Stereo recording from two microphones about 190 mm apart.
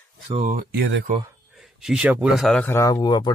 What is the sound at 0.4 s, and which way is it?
Speech, 45° right (ahead or behind).